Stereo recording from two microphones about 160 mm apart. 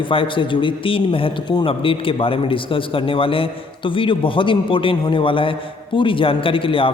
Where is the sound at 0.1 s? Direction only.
35° left (ahead or behind).